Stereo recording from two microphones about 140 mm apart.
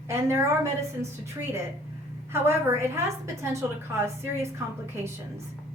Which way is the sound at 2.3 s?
15° right (ahead or behind).